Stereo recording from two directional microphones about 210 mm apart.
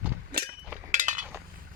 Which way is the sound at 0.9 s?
35° right (ahead or behind).